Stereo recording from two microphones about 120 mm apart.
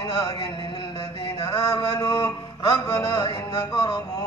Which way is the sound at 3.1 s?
45° left (ahead or behind).